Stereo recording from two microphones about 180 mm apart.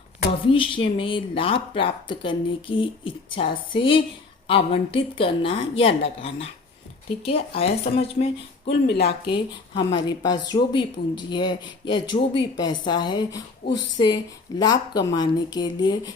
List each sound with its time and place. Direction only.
0.3 s a woman's voice: 30° left (ahead or behind)
8.6 s speech: 65° left (ahead or behind)
9.3 s speech: 25° left (ahead or behind)
13.6 s speech: 65° left (ahead or behind)
14.6 s speech: 20° left (ahead or behind)